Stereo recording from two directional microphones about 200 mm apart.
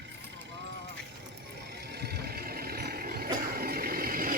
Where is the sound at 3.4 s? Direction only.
50° right (ahead or behind).